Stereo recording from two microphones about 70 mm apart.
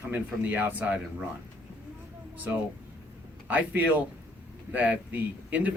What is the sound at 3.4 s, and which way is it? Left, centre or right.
Speech, right.